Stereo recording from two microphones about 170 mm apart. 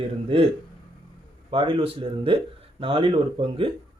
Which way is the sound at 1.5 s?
30° right (ahead or behind).